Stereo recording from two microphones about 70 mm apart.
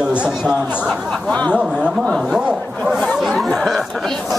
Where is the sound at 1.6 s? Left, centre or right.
Centre.